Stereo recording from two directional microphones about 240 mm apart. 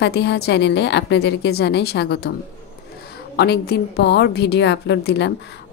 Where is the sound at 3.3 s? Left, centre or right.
Left.